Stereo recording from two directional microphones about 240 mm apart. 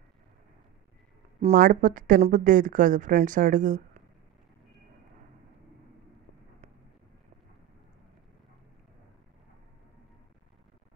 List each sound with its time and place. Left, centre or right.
1.4 s speech: right